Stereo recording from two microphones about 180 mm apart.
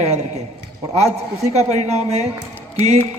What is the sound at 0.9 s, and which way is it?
Speech, 35° right (ahead or behind).